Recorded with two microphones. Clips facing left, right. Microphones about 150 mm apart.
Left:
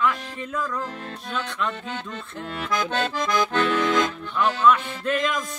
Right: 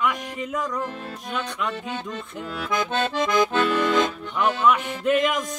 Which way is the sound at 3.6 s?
10° right (ahead or behind).